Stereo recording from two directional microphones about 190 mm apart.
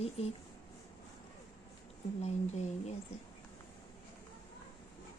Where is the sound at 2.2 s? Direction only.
35° left (ahead or behind).